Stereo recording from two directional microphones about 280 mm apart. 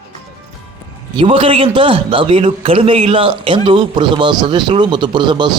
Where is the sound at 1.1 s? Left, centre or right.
Centre.